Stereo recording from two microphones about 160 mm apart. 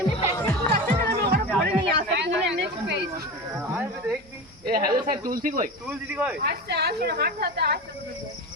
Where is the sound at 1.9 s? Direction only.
90° right.